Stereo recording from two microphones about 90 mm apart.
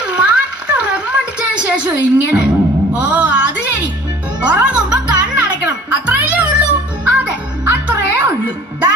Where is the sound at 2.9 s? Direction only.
15° right (ahead or behind).